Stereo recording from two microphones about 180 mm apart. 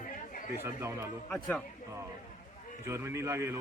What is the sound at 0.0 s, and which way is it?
Chatter, 50° left (ahead or behind).